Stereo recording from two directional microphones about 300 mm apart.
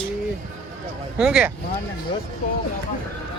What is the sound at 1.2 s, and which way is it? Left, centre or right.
Speech, centre.